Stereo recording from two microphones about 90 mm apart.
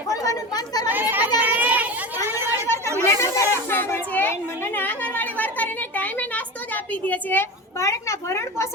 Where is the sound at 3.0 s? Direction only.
30° left (ahead or behind).